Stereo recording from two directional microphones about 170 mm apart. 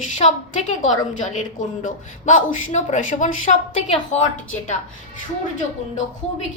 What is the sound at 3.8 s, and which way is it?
Speech, 35° left (ahead or behind).